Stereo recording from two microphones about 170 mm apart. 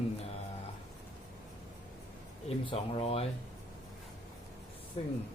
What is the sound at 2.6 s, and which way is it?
Speech, 30° left (ahead or behind).